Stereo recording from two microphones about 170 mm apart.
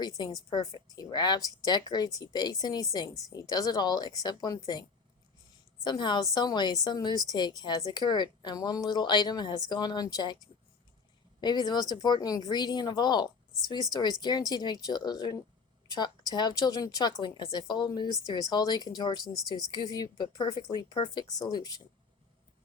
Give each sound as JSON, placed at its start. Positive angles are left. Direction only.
{"t": 0.5, "sound": "speech", "side_deg": 25}